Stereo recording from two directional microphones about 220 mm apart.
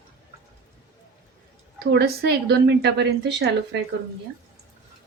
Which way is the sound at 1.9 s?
45° right (ahead or behind).